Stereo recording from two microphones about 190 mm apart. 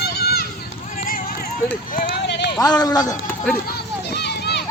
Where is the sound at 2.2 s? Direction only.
65° left (ahead or behind).